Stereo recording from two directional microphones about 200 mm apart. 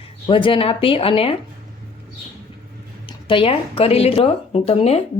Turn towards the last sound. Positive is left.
turn(degrees=30)  # may be behind; listen again after turning